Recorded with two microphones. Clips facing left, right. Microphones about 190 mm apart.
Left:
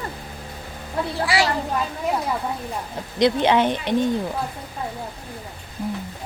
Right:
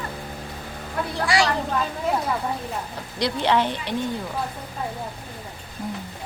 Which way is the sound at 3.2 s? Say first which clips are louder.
Left 4 dB; 20° left (ahead or behind).